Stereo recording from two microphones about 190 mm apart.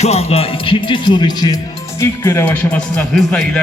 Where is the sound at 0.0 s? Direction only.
35° left (ahead or behind).